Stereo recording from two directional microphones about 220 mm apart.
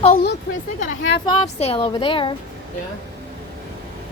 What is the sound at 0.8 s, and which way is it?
Speech, 55° left (ahead or behind).